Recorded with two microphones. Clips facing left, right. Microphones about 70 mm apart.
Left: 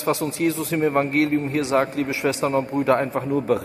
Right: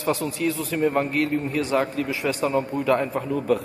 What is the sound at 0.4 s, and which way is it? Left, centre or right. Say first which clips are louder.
A man's voice: left 2 dB; left.